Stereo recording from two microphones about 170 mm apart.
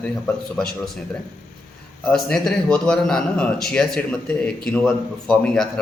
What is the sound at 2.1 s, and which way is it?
Speech, 5° left (ahead or behind).